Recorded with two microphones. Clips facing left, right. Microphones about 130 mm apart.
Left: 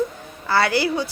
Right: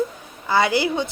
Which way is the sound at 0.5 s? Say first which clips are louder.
Even; 20° right (ahead or behind).